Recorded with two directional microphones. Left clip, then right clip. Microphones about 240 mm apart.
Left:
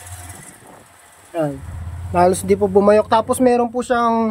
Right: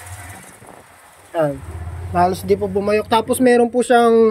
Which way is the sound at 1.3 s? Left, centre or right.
Centre.